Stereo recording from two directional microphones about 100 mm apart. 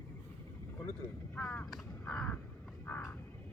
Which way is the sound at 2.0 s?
15° left (ahead or behind).